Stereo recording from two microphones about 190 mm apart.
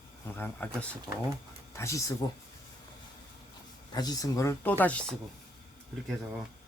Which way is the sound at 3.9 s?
20° left (ahead or behind).